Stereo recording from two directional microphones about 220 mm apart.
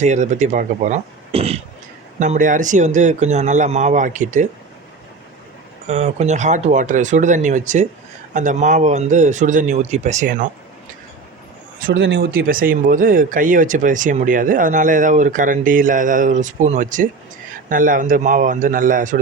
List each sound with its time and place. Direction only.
0.0 s speech: 30° right (ahead or behind)
5.9 s speech: 30° right (ahead or behind)
11.9 s speech: 55° right (ahead or behind); by 19.2 s 40° right (ahead or behind)